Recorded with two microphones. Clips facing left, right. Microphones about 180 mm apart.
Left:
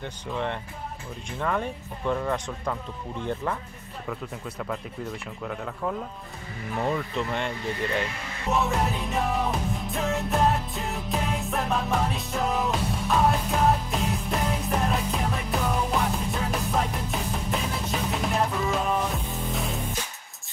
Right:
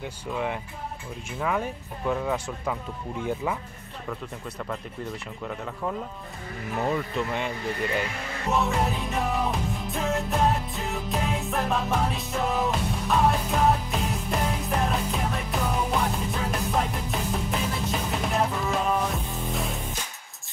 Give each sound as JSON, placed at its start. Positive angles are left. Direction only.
{"t": 0.0, "sound": "speech", "side_deg": -5}
{"t": 6.8, "sound": "speech", "side_deg": 0}
{"t": 8.5, "sound": "music", "side_deg": 0}